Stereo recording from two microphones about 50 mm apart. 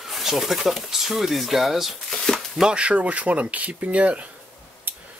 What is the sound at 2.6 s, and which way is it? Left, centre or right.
Speech, right.